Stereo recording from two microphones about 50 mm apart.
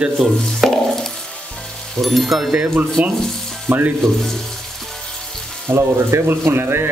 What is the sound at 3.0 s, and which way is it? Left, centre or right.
Rub, right.